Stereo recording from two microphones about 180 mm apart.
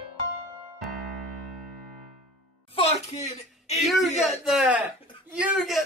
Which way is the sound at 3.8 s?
Centre (ahead or behind).